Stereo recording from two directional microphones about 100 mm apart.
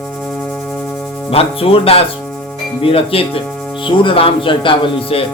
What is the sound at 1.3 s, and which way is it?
Speech, 75° left (ahead or behind).